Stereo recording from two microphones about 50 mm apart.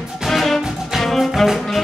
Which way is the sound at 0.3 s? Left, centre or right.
Centre.